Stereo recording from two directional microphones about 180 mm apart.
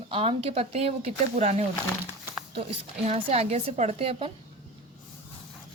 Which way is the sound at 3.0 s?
35° right (ahead or behind).